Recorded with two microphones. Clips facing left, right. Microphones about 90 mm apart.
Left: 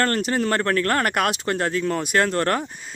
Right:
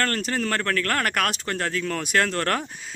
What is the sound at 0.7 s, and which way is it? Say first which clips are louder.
Speech: left 3 dB; 25° left (ahead or behind).